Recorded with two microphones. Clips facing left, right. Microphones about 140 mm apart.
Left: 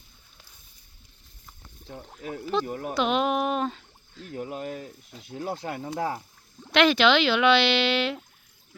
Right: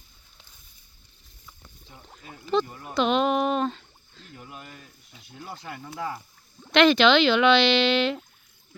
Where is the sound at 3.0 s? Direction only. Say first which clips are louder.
Right 2 dB; 5° left (ahead or behind).